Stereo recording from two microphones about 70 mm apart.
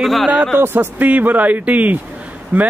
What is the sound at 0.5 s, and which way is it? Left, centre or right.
A man's voice, right.